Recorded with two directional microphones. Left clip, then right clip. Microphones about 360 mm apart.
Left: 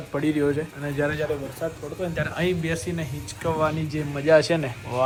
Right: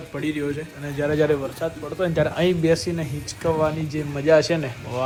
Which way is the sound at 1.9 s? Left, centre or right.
Right.